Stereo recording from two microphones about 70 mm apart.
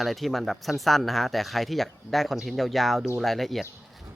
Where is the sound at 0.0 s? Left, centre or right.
Centre.